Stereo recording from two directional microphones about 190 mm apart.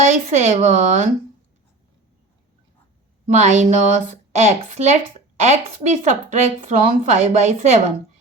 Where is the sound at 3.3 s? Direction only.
40° right (ahead or behind).